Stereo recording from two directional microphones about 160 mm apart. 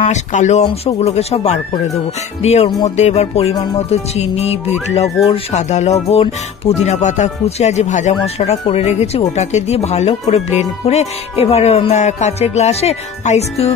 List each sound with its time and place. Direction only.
0.0 s speech: 45° left (ahead or behind)
0.7 s music: 40° left (ahead or behind)
5.3 s speech: 45° left (ahead or behind)